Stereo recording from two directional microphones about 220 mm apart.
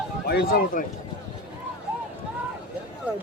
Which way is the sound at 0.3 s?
45° left (ahead or behind).